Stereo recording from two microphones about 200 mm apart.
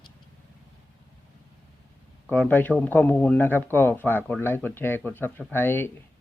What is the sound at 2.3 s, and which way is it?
Speech, 10° left (ahead or behind).